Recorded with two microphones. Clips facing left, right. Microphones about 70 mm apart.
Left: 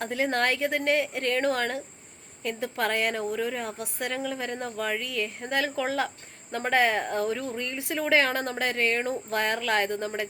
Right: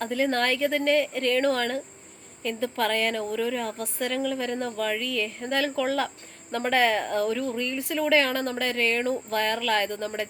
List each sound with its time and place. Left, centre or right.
0.0 s a woman's voice: left
5.6 s speech: left
6.5 s a woman's voice: centre
7.2 s speech: left